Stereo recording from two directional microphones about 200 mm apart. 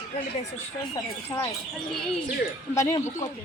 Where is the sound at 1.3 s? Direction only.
20° left (ahead or behind).